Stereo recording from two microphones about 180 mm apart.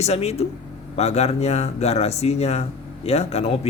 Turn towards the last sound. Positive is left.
turn(degrees=35)  # may be behind; listen again after turning